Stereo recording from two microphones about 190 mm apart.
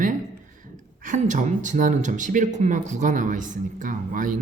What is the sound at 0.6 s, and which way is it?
Speech, 40° right (ahead or behind).